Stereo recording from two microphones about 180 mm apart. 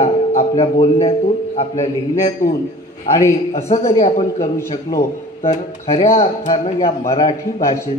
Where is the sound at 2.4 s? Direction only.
50° left (ahead or behind).